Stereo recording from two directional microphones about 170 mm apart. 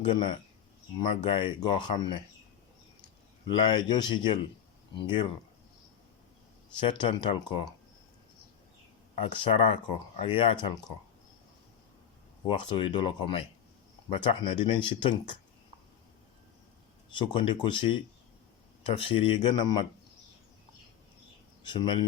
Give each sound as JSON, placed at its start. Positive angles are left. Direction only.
{"t": 0.0, "sound": "speech", "side_deg": 30}
{"t": 3.4, "sound": "speech", "side_deg": 25}
{"t": 6.7, "sound": "speech", "side_deg": 30}
{"t": 9.2, "sound": "speech", "side_deg": 30}
{"t": 12.5, "sound": "speech", "side_deg": 30}
{"t": 17.2, "sound": "speech", "side_deg": 30}
{"t": 21.6, "sound": "speech", "side_deg": 30}